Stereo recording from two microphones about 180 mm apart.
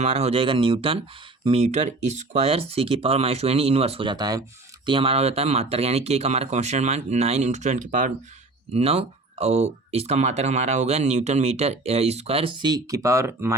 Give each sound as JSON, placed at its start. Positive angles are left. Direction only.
{"t": 0.0, "sound": "speech", "side_deg": -35}